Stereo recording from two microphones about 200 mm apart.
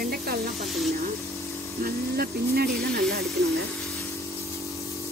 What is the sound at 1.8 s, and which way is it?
Speech, 50° right (ahead or behind).